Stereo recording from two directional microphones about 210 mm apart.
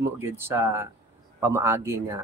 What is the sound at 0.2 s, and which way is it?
Speech, 10° right (ahead or behind).